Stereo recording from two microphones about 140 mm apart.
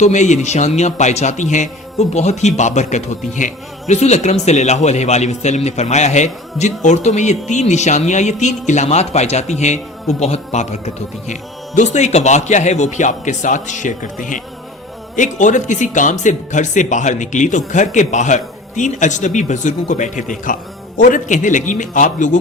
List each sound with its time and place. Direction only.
0.0 s a man's voice: 55° left (ahead or behind)